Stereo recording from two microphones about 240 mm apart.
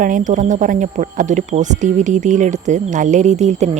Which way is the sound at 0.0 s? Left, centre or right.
Right.